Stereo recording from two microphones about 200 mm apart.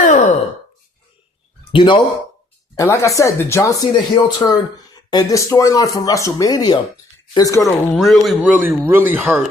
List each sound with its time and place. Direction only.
0.0 s sigh: 40° left (ahead or behind)
1.7 s speech: 25° left (ahead or behind)
7.6 s speech: centre (ahead or behind)